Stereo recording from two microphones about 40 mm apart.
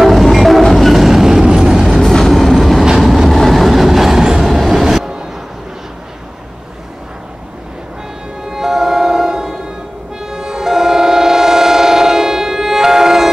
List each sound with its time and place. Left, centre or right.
0.0 s train: centre
1.5 s vehicle: centre
2.0 s train: centre
8.5 s music: centre
10.3 s train: centre